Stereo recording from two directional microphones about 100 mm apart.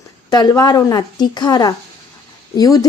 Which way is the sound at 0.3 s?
40° left (ahead or behind).